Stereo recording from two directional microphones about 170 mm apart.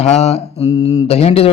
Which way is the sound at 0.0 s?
40° left (ahead or behind).